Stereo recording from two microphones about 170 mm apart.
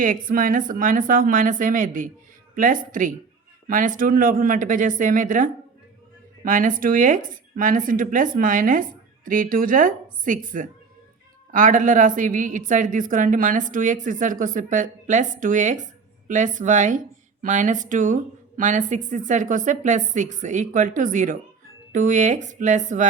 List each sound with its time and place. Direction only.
0.0 s a woman's voice: 55° right (ahead or behind)